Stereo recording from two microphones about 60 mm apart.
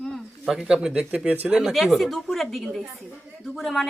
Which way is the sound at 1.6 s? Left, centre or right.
Centre.